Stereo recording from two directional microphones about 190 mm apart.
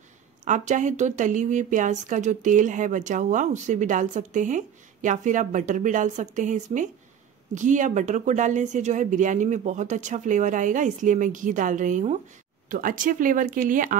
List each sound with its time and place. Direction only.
0.5 s speech: 40° right (ahead or behind)